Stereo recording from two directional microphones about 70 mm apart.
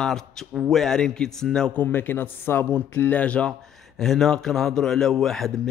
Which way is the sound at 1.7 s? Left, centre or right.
Left.